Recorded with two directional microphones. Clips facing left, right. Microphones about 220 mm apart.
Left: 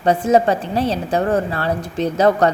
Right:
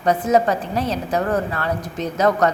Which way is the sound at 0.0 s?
30° left (ahead or behind).